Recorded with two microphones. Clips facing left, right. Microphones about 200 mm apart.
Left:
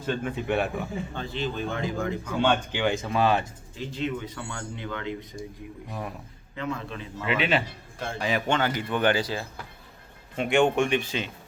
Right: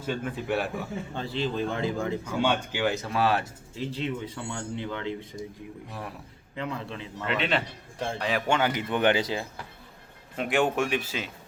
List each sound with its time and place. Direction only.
0.0 s speech: 5° right (ahead or behind)
1.1 s a man's voice: 30° right (ahead or behind)
2.2 s speech: 10° right (ahead or behind)
3.8 s a man's voice: 30° right (ahead or behind)
6.6 s a man's voice: 30° right (ahead or behind)
7.2 s speech: 5° left (ahead or behind)
8.4 s a man's voice: 10° right (ahead or behind)
10.3 s speech: centre (ahead or behind)